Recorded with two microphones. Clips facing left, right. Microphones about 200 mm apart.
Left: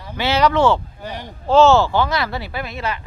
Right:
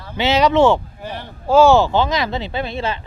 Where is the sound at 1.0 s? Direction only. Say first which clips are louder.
Right 1 dB; 15° left (ahead or behind).